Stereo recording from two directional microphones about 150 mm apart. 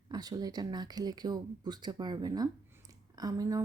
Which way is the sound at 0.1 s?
25° right (ahead or behind).